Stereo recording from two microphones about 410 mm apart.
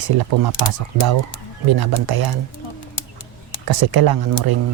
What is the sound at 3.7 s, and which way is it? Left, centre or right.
Speech, right.